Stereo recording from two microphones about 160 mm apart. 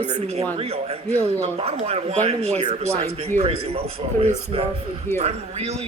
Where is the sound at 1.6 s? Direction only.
40° right (ahead or behind).